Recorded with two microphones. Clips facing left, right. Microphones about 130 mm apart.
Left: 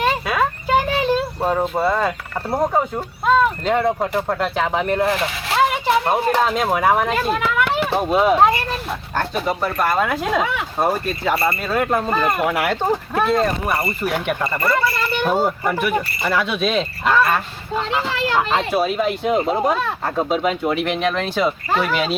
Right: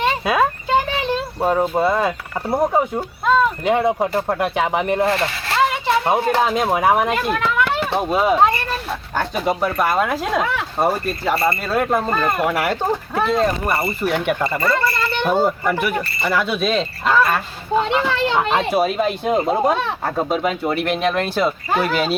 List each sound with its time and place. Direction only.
0.0 s a sound: 25° right (ahead or behind)
1.4 s speech: 10° right (ahead or behind)
5.0 s speech: 5° left (ahead or behind)
7.3 s speech: 10° left (ahead or behind); by 18.9 s 5° right (ahead or behind)
18.9 s speech: 5° left (ahead or behind)